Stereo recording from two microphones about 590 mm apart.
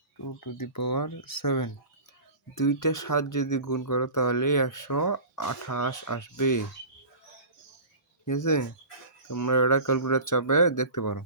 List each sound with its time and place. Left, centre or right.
0.3 s speech: left
8.2 s speech: left